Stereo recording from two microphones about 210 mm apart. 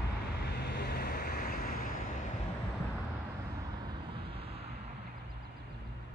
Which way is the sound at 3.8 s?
25° right (ahead or behind).